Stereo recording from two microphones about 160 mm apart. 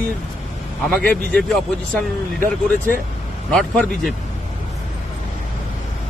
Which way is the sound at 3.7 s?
5° left (ahead or behind).